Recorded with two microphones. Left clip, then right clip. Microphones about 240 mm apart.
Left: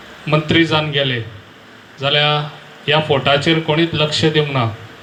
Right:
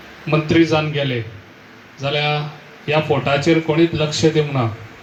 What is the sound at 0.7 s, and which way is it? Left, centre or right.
Speech, left.